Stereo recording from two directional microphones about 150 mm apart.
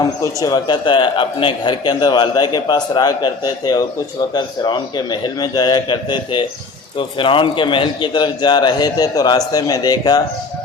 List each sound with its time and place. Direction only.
0.0 s a man's voice: 20° left (ahead or behind)